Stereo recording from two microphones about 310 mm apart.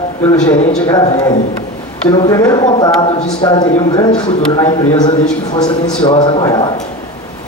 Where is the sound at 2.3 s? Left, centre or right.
Centre.